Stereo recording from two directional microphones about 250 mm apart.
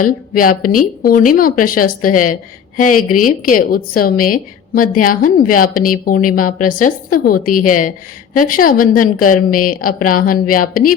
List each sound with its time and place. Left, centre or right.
0.0 s a woman's voice: left